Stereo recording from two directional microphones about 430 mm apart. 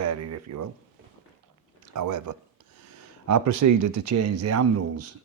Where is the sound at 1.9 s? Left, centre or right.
Right.